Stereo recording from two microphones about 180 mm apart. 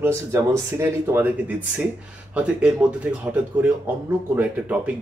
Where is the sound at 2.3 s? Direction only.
5° right (ahead or behind).